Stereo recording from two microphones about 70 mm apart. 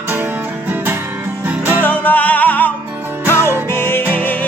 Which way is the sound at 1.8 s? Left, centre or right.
Left.